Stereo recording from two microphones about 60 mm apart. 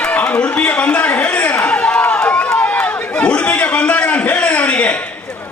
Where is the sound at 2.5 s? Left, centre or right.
Left.